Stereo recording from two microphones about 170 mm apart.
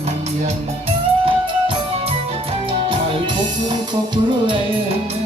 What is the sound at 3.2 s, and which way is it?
Speech, 25° right (ahead or behind).